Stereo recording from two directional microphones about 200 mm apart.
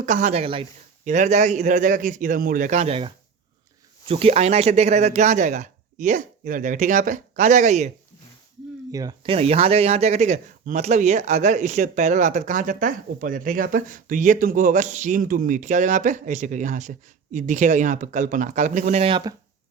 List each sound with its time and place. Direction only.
0.0 s speech: 40° right (ahead or behind)
4.1 s speech: 30° right (ahead or behind)
8.9 s speech: 20° right (ahead or behind)